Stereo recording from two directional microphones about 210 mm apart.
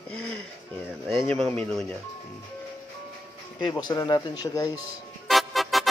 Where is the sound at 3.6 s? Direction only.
20° left (ahead or behind).